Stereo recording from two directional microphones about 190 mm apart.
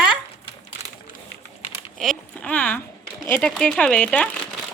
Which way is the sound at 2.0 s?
5° left (ahead or behind).